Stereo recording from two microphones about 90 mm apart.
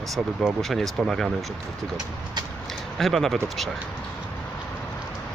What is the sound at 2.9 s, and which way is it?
Speech, centre (ahead or behind).